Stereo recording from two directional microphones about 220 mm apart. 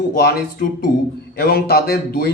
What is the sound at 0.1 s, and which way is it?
Speech, 45° left (ahead or behind).